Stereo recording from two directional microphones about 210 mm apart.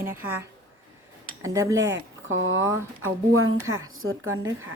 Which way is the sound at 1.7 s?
65° right (ahead or behind).